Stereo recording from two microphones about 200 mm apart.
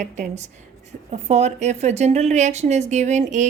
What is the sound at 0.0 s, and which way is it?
A woman's voice, 35° right (ahead or behind).